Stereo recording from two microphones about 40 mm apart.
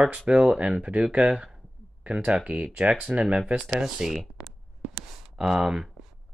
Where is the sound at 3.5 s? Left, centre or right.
Centre.